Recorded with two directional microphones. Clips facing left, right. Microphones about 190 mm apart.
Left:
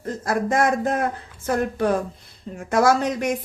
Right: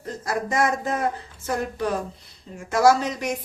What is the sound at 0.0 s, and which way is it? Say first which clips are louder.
A woman's voice: left 4 dB; 50° left (ahead or behind).